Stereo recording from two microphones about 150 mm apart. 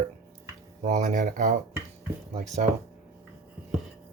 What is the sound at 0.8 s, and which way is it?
Speech, 50° right (ahead or behind).